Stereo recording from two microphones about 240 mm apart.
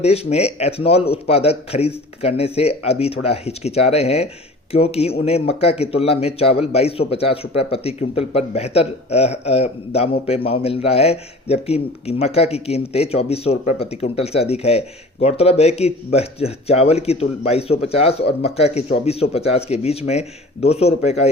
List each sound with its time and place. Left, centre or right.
0.0 s speech: left